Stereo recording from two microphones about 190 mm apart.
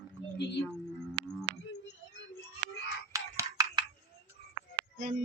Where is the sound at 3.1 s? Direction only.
15° right (ahead or behind).